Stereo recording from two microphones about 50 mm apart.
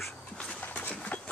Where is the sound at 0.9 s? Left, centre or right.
Left.